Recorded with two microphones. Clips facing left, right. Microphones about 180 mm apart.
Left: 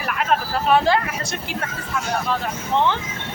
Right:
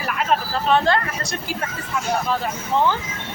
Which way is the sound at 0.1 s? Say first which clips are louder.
Even; centre (ahead or behind).